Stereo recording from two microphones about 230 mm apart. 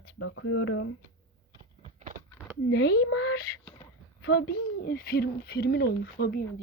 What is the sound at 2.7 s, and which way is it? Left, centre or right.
Speech, left.